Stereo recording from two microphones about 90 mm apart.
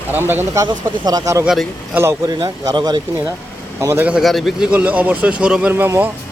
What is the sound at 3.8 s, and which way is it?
Speech, 30° right (ahead or behind).